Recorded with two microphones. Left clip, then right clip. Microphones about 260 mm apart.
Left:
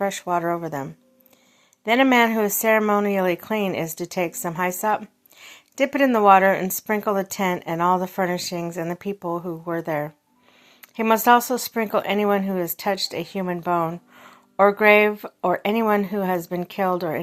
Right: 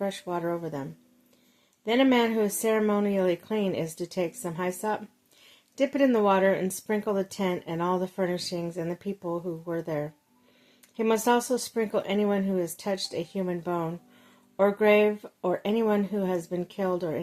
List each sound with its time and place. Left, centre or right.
0.0 s speech: centre